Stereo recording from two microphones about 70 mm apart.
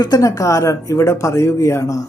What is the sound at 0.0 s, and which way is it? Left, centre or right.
Speech, left.